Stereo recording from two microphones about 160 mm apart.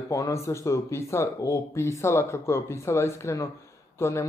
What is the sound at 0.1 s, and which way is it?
Speech, 20° left (ahead or behind).